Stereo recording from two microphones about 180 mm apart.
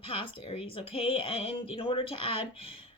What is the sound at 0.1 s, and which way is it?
Speech, 30° left (ahead or behind).